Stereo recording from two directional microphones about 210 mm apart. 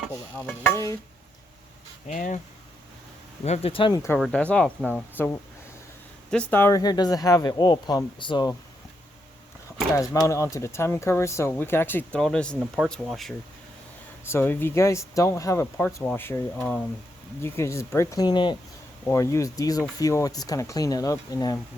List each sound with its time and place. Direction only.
0.3 s speech: 10° left (ahead or behind)
2.0 s speech: 35° left (ahead or behind)
3.4 s speech: 30° left (ahead or behind)
4.2 s speech: 5° left (ahead or behind)
6.3 s speech: 10° left (ahead or behind)
10.2 s speech: 15° left (ahead or behind)